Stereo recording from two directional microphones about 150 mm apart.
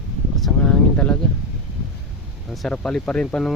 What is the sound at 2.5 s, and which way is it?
Speech, centre (ahead or behind).